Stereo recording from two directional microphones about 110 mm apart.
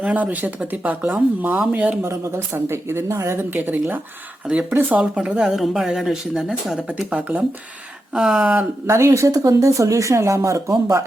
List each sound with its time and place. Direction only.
0.0 s speech: 15° right (ahead or behind)
8.9 s speech: 25° right (ahead or behind)